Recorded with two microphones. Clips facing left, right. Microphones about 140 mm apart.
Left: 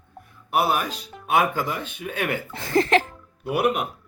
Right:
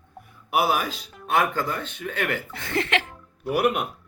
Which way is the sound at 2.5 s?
35° left (ahead or behind).